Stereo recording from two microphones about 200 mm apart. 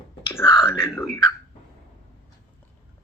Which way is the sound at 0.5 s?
5° right (ahead or behind).